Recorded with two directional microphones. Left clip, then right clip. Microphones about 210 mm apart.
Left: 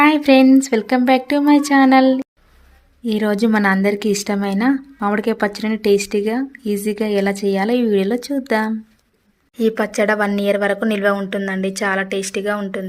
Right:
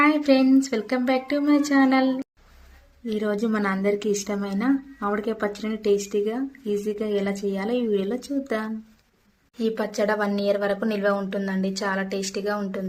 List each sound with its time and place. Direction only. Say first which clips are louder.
0.0 s a woman's voice: left 7 dB; 35° left (ahead or behind); by 12.8 s 20° left (ahead or behind)